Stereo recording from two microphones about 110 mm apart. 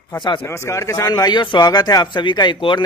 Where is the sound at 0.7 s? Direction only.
25° left (ahead or behind).